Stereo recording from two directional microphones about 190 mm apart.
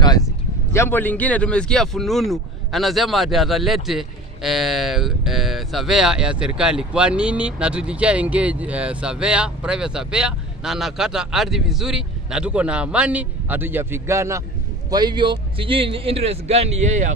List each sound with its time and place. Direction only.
0.7 s a man's voice: 10° left (ahead or behind); by 17.1 s 35° right (ahead or behind)